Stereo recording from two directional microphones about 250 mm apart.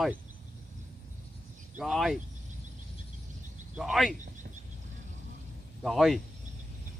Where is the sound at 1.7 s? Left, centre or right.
Centre.